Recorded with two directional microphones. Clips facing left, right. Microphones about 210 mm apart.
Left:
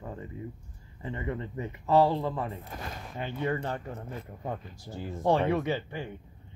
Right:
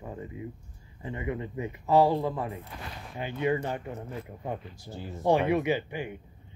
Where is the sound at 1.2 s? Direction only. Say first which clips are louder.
Right 2 dB; 15° right (ahead or behind).